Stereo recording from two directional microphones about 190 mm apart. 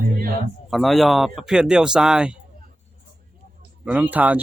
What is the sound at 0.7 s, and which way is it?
Speech, centre (ahead or behind).